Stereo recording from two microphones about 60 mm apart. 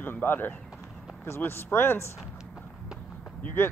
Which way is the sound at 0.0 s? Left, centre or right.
Left.